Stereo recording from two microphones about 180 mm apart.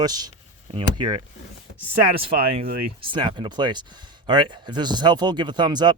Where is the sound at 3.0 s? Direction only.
25° right (ahead or behind).